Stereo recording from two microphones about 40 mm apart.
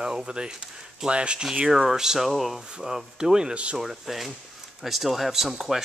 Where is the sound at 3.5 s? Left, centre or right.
Right.